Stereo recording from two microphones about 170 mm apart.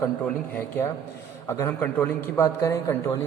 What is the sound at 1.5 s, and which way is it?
A man's voice, 15° left (ahead or behind).